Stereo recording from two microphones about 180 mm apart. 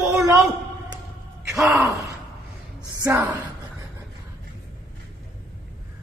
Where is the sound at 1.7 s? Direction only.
15° right (ahead or behind).